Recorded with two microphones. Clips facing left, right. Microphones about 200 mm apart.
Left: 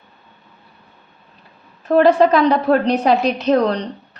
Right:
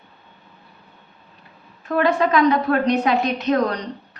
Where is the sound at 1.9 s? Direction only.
30° left (ahead or behind).